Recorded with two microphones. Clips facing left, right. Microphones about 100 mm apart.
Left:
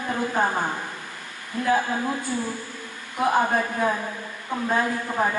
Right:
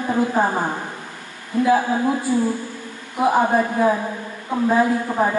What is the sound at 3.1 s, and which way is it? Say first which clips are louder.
A woman's voice: right 4 dB; 5° right (ahead or behind).